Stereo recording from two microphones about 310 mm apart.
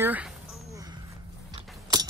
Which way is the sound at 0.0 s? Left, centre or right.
Centre.